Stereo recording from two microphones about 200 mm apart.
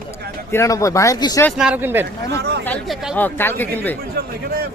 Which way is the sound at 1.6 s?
5° right (ahead or behind).